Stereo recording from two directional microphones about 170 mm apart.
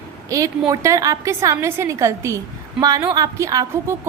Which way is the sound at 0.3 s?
20° right (ahead or behind).